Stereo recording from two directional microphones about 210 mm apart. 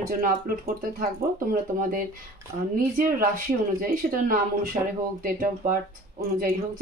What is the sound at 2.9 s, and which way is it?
Speech, 40° right (ahead or behind).